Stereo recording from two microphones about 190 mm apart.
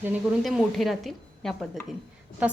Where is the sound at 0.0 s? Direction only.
5° right (ahead or behind).